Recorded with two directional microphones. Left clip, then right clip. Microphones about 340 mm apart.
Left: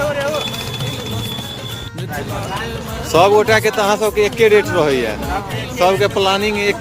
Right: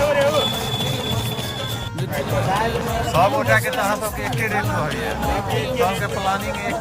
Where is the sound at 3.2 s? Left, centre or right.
Centre.